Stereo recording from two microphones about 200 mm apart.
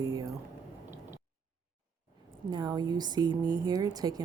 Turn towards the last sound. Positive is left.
turn(degrees=-20)  # may be behind; listen again after turning